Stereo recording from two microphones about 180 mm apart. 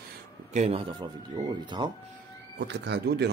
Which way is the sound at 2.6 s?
75° right (ahead or behind).